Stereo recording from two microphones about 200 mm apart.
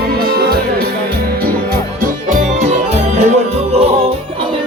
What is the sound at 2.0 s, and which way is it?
Music, 40° right (ahead or behind).